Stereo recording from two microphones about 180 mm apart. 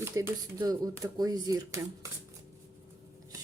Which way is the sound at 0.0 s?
20° right (ahead or behind).